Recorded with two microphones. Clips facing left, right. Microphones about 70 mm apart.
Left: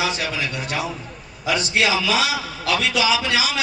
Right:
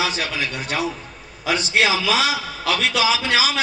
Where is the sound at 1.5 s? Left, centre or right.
Right.